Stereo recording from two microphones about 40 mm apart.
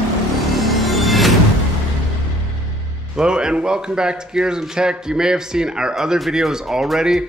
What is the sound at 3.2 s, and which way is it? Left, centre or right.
Speech, right.